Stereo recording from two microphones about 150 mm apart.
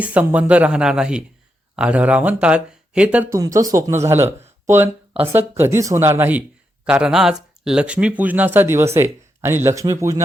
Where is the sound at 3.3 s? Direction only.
20° right (ahead or behind).